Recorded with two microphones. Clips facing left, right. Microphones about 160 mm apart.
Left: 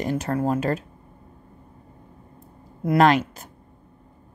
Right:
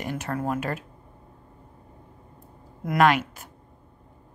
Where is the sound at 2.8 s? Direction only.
35° left (ahead or behind).